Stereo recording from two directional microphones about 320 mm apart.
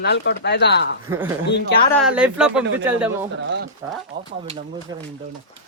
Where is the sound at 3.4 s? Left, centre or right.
Right.